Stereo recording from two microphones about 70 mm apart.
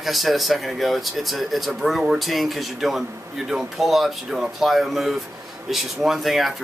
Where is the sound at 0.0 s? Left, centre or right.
Centre.